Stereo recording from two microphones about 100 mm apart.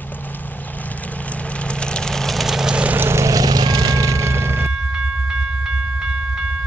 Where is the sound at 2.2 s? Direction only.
Centre (ahead or behind).